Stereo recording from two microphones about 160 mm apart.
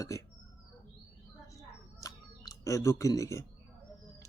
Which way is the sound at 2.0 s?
20° left (ahead or behind).